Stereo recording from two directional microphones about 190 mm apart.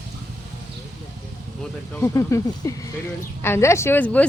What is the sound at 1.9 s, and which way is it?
A woman's voice, 15° left (ahead or behind).